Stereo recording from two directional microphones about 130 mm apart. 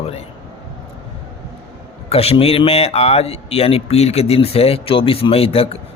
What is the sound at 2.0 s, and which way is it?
A man's voice, 50° left (ahead or behind).